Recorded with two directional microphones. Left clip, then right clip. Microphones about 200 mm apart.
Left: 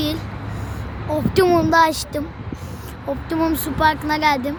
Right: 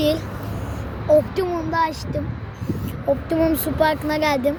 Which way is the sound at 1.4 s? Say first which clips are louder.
Left 8 dB; 50° left (ahead or behind).